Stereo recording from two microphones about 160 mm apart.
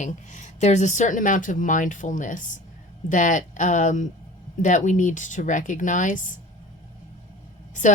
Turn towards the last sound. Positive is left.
turn(degrees=50)  # may be behind; listen again after turning